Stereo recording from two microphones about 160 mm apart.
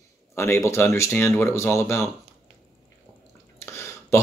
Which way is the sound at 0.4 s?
15° left (ahead or behind).